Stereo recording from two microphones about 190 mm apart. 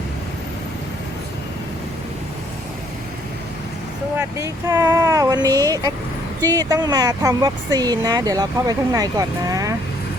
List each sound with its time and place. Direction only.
4.2 s speech: 15° right (ahead or behind)